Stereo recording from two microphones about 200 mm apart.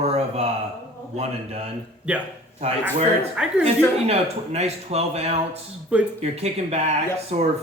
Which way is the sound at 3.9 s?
30° right (ahead or behind).